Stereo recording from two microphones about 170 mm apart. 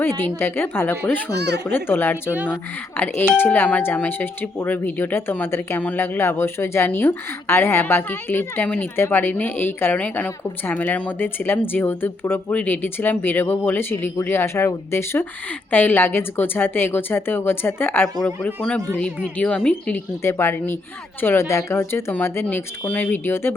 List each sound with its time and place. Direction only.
0.2 s speech: 10° left (ahead or behind)
1.4 s speech: 80° right
1.6 s speech: 10° left (ahead or behind)
2.3 s speech: 10° right (ahead or behind)
3.3 s speech: 10° left (ahead or behind)